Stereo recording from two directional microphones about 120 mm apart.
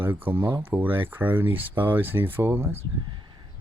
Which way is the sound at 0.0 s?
15° right (ahead or behind).